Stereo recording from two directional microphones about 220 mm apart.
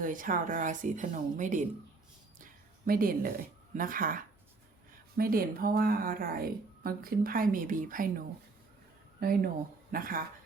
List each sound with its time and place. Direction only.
0.0 s speech: 40° right (ahead or behind)
2.8 s speech: 40° right (ahead or behind)
9.2 s speech: 45° right (ahead or behind)